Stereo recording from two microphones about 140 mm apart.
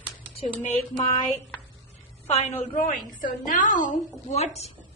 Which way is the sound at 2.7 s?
65° left (ahead or behind).